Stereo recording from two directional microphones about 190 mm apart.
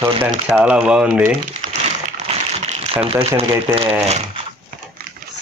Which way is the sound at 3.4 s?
30° right (ahead or behind).